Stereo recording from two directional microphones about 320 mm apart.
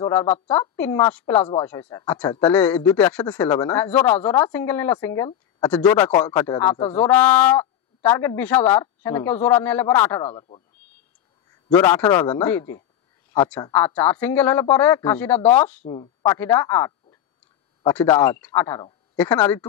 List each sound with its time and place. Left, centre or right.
0.0 s speech: centre
10.2 s speech: centre
11.7 s speech: centre